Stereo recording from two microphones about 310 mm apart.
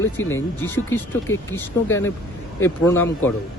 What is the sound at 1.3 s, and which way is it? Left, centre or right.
Speech, left.